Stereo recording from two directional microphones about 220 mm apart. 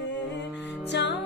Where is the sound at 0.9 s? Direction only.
50° left (ahead or behind).